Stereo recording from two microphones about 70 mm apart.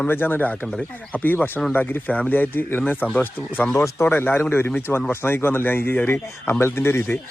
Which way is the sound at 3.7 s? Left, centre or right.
Left.